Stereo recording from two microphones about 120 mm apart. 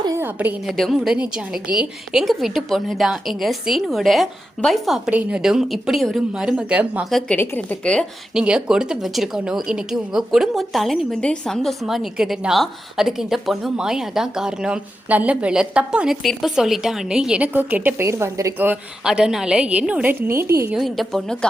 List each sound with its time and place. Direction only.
0.2 s a woman's voice: 15° right (ahead or behind)
0.7 s a woman's voice: centre (ahead or behind)
2.2 s speech: centre (ahead or behind)
7.0 s speech: centre (ahead or behind)
7.3 s a woman's voice: 15° left (ahead or behind)
8.4 s speech: 5° right (ahead or behind); by 18.5 s 25° right (ahead or behind)
19.0 s a woman's voice: 5° right (ahead or behind); by 20.7 s 25° right (ahead or behind)
20.7 s speech: centre (ahead or behind)